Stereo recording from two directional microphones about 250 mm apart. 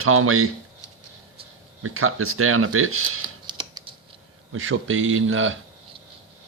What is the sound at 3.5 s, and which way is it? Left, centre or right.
Typing, centre.